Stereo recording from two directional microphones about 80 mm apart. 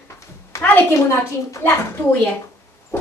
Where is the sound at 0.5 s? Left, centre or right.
Left.